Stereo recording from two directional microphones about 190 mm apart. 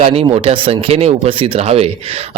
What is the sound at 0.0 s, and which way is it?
Speech, 30° right (ahead or behind).